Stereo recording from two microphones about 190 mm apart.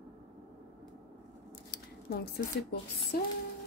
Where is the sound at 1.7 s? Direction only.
55° left (ahead or behind).